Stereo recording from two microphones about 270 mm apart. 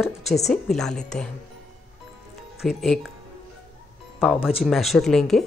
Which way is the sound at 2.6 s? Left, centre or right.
Centre.